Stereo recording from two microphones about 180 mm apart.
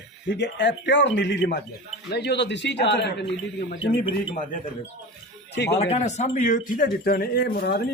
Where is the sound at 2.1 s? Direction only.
70° left (ahead or behind).